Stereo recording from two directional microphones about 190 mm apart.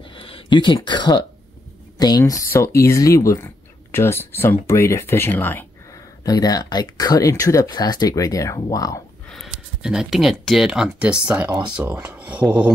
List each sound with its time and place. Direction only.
0.1 s speech: 25° left (ahead or behind)
9.3 s speech: centre (ahead or behind)